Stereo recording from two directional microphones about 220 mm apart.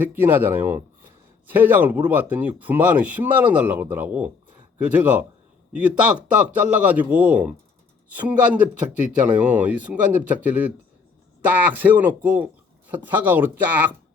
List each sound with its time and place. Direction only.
0.0 s speech: 10° right (ahead or behind)